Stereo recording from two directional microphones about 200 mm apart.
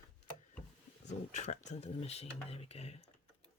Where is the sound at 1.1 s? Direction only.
35° left (ahead or behind).